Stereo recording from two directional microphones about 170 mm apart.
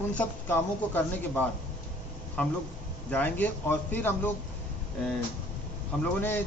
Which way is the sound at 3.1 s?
10° left (ahead or behind).